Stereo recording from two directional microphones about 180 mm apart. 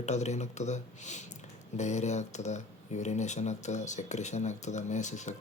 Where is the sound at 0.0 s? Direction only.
40° left (ahead or behind).